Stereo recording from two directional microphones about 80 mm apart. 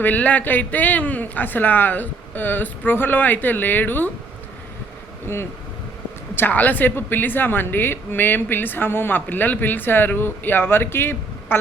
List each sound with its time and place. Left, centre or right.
0.0 s a woman's voice: centre
5.2 s a woman's voice: left